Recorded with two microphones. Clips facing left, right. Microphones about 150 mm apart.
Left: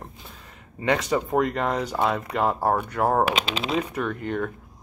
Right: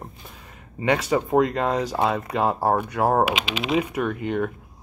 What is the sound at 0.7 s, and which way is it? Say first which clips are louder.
Speech: right 2 dB; 10° right (ahead or behind).